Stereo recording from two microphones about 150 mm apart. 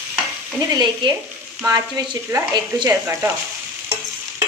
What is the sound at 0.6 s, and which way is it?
Speech, 25° right (ahead or behind).